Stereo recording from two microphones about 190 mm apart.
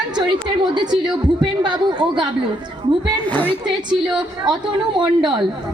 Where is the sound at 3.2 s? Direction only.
10° left (ahead or behind).